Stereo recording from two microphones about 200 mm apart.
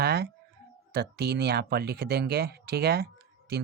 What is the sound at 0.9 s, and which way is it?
Speech, 55° right (ahead or behind).